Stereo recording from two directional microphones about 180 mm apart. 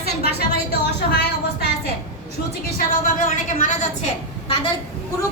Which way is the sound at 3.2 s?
40° left (ahead or behind).